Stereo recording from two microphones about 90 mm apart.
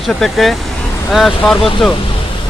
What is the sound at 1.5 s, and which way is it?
Speech, 75° left (ahead or behind).